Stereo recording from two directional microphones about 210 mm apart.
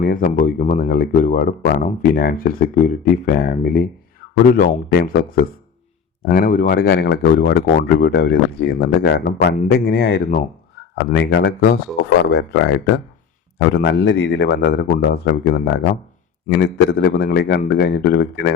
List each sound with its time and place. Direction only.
0.0 s speech: 40° left (ahead or behind)